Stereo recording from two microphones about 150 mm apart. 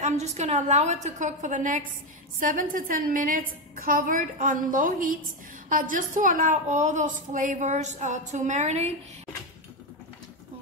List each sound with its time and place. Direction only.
0.0 s a woman's voice: 50° right (ahead or behind)